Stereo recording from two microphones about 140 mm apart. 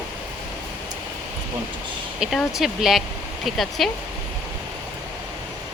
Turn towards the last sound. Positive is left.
turn(degrees=0)  # may be behind; listen again after turning